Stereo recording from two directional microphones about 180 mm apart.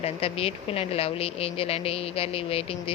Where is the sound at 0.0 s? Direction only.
35° left (ahead or behind).